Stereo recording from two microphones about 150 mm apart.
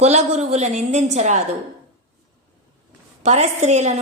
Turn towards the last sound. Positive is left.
turn(degrees=-50)  # may be behind; listen again after turning